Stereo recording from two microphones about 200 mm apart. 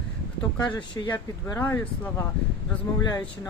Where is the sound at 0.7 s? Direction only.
25° left (ahead or behind).